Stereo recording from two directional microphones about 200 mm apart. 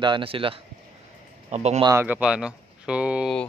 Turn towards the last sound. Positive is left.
turn(degrees=-5)  # may be behind; listen again after turning